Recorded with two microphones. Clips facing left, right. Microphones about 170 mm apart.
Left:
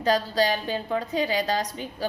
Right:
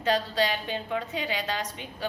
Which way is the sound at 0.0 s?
40° left (ahead or behind).